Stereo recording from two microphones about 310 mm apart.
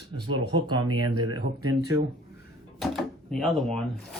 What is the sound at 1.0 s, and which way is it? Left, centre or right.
Speech, right.